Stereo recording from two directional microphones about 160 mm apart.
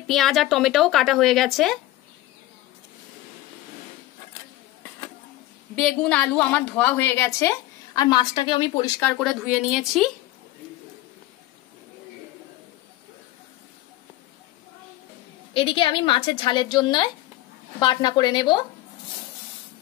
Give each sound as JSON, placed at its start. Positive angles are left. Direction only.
{"t": 0.0, "sound": "a woman's voice", "side_deg": 0}
{"t": 5.8, "sound": "a woman's voice", "side_deg": 5}
{"t": 9.2, "sound": "a woman's voice", "side_deg": -5}
{"t": 15.5, "sound": "a woman's voice", "side_deg": 35}